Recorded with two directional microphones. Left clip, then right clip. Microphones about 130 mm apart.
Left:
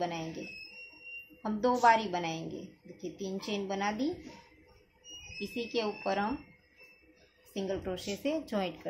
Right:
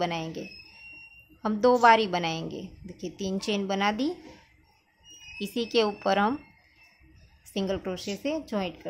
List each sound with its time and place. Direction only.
0.0 s a woman's voice: 45° right (ahead or behind)
1.4 s a woman's voice: 55° right (ahead or behind)
5.4 s speech: 60° right (ahead or behind)
7.5 s a woman's voice: 45° right (ahead or behind); by 8.7 s 25° right (ahead or behind)